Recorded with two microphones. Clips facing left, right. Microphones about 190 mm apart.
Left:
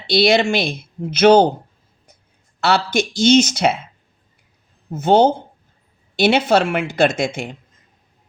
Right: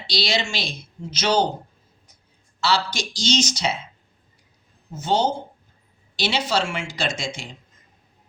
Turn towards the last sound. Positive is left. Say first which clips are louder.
# left 11 dB
turn(degrees=55)  # may be behind; listen again after turning